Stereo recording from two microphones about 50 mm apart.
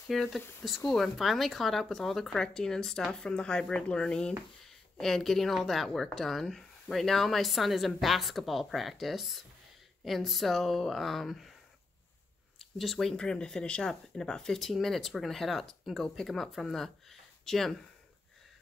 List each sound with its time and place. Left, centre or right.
0.1 s speech: centre
4.6 s speech: centre
12.5 s a sound: centre
13.1 s speech: centre
14.7 s speech: centre